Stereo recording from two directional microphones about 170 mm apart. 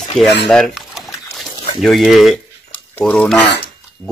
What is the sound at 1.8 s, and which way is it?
Speech, centre (ahead or behind).